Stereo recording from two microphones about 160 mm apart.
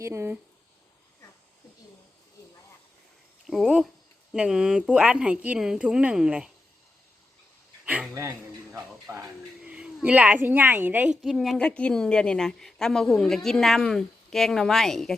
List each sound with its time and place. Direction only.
0.0 s speech: 15° right (ahead or behind)
3.4 s speech: centre (ahead or behind)
7.9 s a man's voice: 10° right (ahead or behind)